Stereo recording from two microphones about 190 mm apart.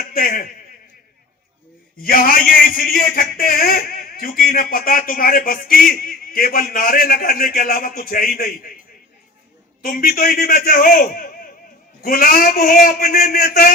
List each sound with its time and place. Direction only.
0.1 s a man's voice: 50° left (ahead or behind)
2.0 s speech: 50° left (ahead or behind)
9.8 s speech: 50° left (ahead or behind)